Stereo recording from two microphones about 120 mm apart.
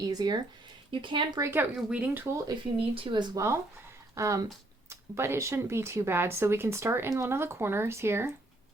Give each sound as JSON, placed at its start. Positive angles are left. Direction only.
{"t": 0.0, "sound": "speech", "side_deg": -35}
{"t": 1.4, "sound": "speech", "side_deg": -15}
{"t": 2.9, "sound": "speech", "side_deg": -45}
{"t": 4.1, "sound": "speech", "side_deg": -25}